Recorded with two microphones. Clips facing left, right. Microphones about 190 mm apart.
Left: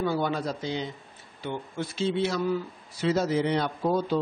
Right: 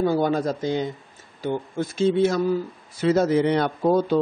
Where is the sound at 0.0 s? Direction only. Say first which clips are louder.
Right 6 dB; 45° right (ahead or behind).